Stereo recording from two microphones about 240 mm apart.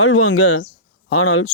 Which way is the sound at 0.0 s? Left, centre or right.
Left.